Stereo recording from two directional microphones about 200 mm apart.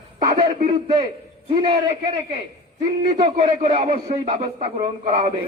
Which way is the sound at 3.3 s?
30° right (ahead or behind).